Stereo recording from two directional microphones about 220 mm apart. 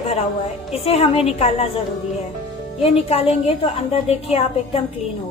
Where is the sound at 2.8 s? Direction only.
25° left (ahead or behind).